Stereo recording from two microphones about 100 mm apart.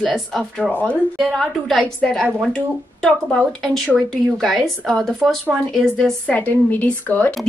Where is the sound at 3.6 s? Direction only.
5° left (ahead or behind).